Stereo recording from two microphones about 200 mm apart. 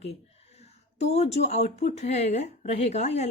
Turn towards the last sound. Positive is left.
turn(degrees=35)  # may be behind; listen again after turning